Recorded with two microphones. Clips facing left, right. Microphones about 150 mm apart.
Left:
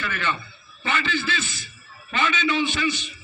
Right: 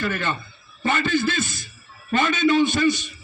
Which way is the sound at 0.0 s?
45° right (ahead or behind).